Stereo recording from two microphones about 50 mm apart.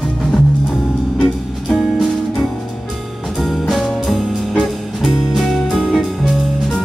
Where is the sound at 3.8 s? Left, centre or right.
Centre.